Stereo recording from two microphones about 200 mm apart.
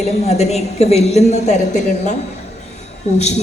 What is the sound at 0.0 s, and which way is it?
A woman's voice, 35° left (ahead or behind).